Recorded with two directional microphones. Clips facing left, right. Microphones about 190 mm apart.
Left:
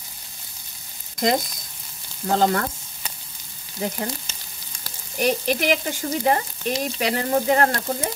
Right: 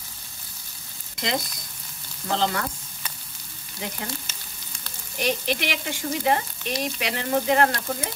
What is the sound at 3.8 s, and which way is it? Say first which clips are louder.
Frying: left 6 dB; 40° left (ahead or behind).